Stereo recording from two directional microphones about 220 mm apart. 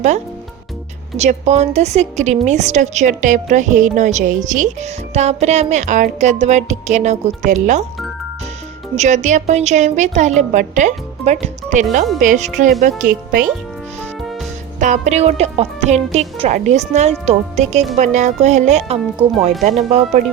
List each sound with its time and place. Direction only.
1.1 s a woman's voice: 30° right (ahead or behind)
9.0 s a woman's voice: 35° right (ahead or behind)
14.8 s a woman's voice: 30° right (ahead or behind)